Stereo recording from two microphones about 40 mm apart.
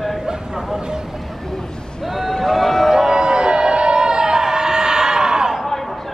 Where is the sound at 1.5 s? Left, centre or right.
Centre.